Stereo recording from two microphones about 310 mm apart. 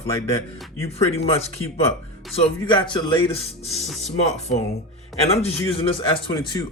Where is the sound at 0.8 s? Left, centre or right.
Centre.